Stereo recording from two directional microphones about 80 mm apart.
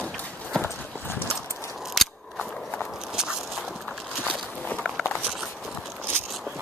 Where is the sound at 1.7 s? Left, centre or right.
Centre.